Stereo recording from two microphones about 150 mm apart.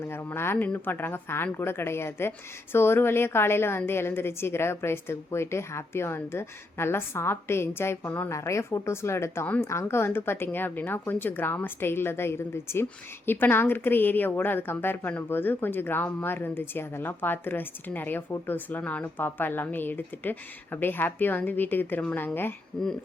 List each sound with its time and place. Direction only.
0.1 s speech: 15° left (ahead or behind)